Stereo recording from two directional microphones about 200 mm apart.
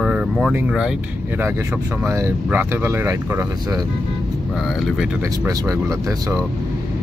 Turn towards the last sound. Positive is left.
turn(degrees=-15)  # may be behind; listen again after turning